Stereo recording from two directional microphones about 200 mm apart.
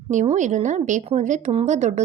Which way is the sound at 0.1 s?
40° right (ahead or behind).